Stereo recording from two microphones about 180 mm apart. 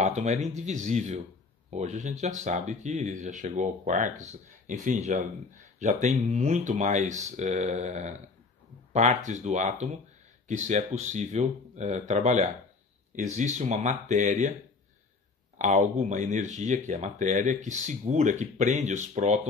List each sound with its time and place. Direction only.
0.0 s speech: 40° right (ahead or behind)
15.5 s speech: 40° right (ahead or behind)